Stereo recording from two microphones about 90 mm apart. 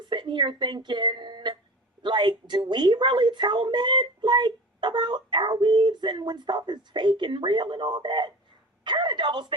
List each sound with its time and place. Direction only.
0.0 s a woman's voice: 60° right (ahead or behind)